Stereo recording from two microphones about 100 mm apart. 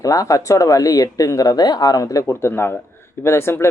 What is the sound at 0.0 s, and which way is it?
Speech, 35° left (ahead or behind).